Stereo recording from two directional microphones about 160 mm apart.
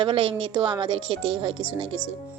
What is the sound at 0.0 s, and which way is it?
A woman's voice, 35° right (ahead or behind).